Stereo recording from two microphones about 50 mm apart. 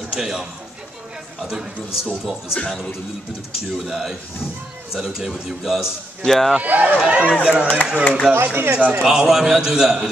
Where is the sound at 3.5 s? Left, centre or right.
Centre.